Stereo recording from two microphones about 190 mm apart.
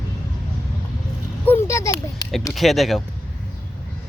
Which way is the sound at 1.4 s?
15° left (ahead or behind).